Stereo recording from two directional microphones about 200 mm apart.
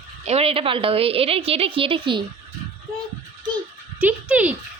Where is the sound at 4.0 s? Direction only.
5° right (ahead or behind).